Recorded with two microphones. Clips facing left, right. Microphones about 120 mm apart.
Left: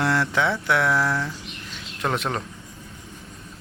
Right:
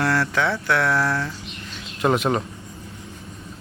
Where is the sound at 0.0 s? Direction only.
20° left (ahead or behind).